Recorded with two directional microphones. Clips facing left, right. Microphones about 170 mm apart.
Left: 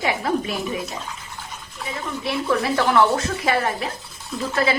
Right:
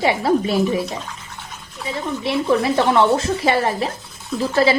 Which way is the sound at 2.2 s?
25° right (ahead or behind).